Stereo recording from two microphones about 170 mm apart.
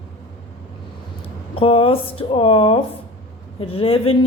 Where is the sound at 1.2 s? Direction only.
35° left (ahead or behind).